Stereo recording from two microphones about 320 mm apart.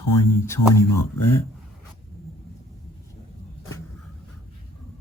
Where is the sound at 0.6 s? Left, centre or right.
Left.